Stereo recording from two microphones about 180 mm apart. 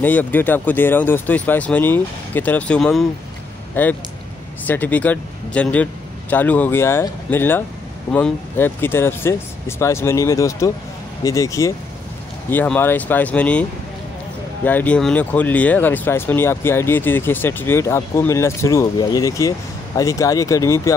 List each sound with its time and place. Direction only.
0.0 s speech: 10° left (ahead or behind)